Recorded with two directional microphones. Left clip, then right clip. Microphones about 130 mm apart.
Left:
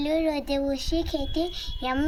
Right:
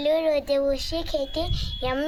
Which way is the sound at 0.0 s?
20° right (ahead or behind).